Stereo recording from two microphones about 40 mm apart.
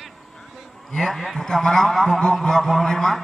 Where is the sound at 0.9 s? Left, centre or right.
Centre.